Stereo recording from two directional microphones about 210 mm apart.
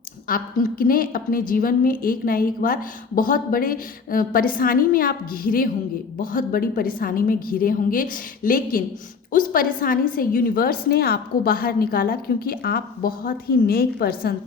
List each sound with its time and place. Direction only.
0.3 s a woman's voice: 45° left (ahead or behind)